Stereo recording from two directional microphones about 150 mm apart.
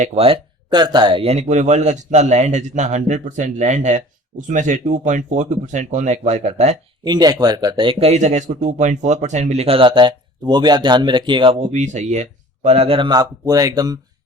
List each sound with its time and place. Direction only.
0.0 s speech: 45° right (ahead or behind)
7.0 s speech: 25° right (ahead or behind)
11.6 s speech: 50° right (ahead or behind); by 14.0 s 25° right (ahead or behind)